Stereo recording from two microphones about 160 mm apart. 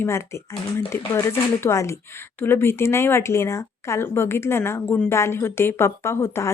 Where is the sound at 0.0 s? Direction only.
15° left (ahead or behind).